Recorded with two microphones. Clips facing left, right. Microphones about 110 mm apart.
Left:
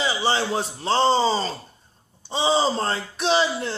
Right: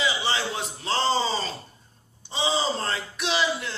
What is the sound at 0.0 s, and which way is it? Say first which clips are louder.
Speech: left 4 dB; 35° left (ahead or behind).